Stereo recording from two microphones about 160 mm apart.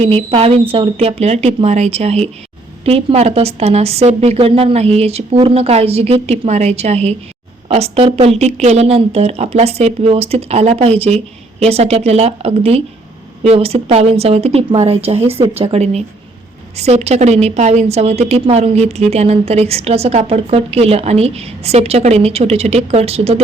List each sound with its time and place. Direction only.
0.0 s a woman's voice: 40° right (ahead or behind)